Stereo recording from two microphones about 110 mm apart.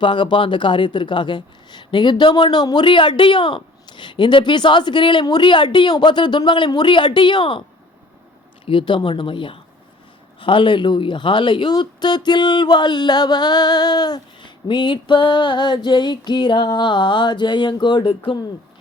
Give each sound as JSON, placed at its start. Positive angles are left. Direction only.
{"t": 0.0, "sound": "speech", "side_deg": 45}
{"t": 8.6, "sound": "speech", "side_deg": 50}